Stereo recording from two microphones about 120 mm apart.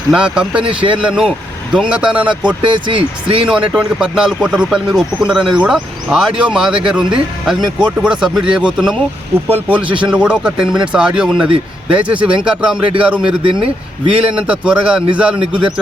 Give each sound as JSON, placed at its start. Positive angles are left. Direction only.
{"t": 0.1, "sound": "speech", "side_deg": -10}
{"t": 2.6, "sound": "speech", "side_deg": -40}
{"t": 3.4, "sound": "speech", "side_deg": -10}
{"t": 9.8, "sound": "speech", "side_deg": -45}
{"t": 10.1, "sound": "speech", "side_deg": -10}
{"t": 13.4, "sound": "speech", "side_deg": -50}
{"t": 14.3, "sound": "speech", "side_deg": -10}